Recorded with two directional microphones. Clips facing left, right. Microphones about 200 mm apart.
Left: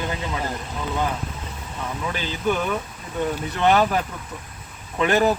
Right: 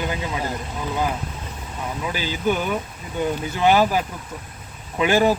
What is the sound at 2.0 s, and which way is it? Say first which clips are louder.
Speech: right 1 dB; 5° right (ahead or behind).